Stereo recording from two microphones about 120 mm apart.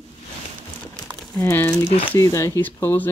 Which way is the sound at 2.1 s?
25° left (ahead or behind).